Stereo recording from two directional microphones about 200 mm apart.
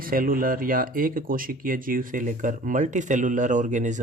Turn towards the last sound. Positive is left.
turn(degrees=-35)  # may be behind; listen again after turning